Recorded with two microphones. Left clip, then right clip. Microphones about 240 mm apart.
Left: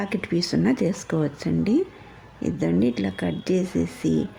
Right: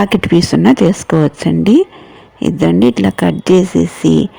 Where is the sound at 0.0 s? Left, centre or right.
Right.